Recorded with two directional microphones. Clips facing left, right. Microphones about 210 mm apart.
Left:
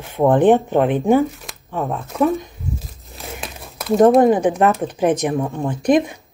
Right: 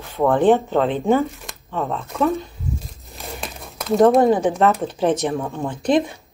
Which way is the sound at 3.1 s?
Centre (ahead or behind).